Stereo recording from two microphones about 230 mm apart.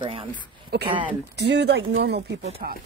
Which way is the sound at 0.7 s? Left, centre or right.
Right.